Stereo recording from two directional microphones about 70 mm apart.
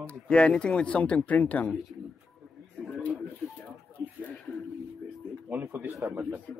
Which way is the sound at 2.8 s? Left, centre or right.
Centre.